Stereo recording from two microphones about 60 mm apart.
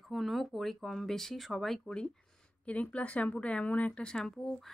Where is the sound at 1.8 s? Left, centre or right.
Centre.